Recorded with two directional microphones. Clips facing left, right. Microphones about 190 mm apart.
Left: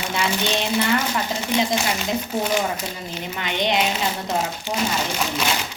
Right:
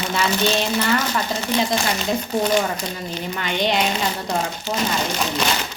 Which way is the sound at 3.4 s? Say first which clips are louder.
Right 1 dB; 20° left (ahead or behind).